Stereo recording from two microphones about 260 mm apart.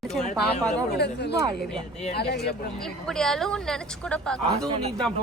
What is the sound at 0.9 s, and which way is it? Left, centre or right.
Speech, left.